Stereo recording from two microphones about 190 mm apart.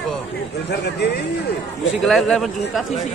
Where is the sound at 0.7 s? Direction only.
60° left (ahead or behind).